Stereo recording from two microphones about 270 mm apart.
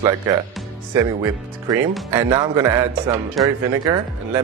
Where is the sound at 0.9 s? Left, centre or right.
Centre.